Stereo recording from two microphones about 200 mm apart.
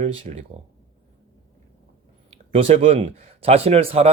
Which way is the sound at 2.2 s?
30° right (ahead or behind).